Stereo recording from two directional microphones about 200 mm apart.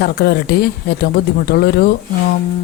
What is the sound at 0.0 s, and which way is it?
Speech, 55° left (ahead or behind).